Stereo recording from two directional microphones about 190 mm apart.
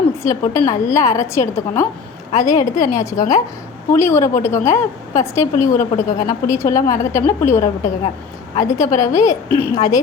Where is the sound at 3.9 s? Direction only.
15° left (ahead or behind).